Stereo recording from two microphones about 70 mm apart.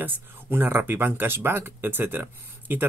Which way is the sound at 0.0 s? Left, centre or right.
Right.